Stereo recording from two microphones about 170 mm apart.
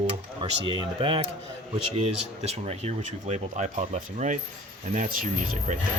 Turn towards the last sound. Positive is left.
turn(degrees=-55)  # may be behind; listen again after turning